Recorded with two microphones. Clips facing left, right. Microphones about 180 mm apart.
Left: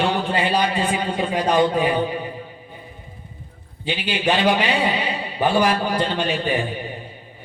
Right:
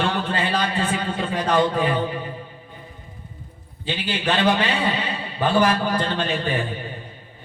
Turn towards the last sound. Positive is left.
turn(degrees=15)  # may be behind; listen again after turning